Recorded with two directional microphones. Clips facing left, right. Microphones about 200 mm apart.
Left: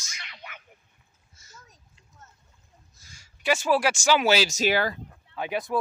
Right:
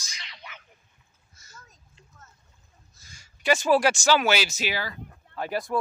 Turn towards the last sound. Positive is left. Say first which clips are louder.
# even
turn(degrees=0)  # may be behind; listen again after turning